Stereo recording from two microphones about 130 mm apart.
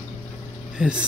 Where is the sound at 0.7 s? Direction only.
5° right (ahead or behind).